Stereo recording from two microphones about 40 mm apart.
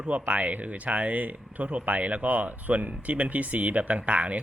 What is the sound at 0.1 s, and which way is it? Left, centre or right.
A man's voice, right.